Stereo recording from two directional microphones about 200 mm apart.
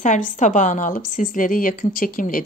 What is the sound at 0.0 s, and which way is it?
A woman's voice, 40° left (ahead or behind).